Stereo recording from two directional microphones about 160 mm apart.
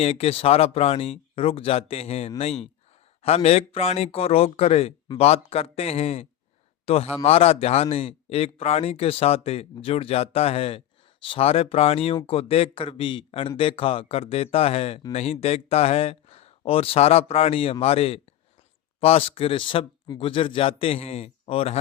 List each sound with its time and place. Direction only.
0.0 s a man's voice: 40° left (ahead or behind)